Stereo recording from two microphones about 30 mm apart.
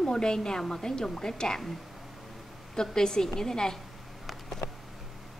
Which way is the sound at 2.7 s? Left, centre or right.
Left.